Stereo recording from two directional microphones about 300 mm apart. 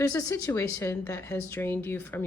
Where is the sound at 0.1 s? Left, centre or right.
Centre.